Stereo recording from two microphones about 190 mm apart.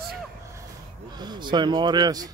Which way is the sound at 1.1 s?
20° right (ahead or behind).